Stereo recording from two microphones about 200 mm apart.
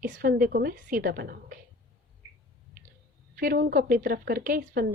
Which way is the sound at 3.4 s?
45° right (ahead or behind).